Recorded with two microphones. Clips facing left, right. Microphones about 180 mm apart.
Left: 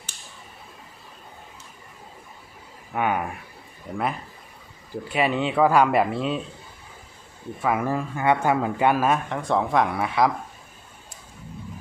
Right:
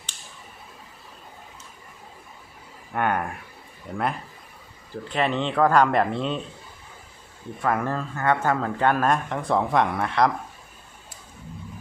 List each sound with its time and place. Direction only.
2.9 s speech: 5° left (ahead or behind)
5.0 s speech: 10° left (ahead or behind)
7.6 s speech: 5° left (ahead or behind)